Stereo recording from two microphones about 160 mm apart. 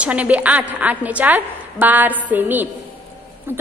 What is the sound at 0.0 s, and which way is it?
A woman's voice, 10° right (ahead or behind).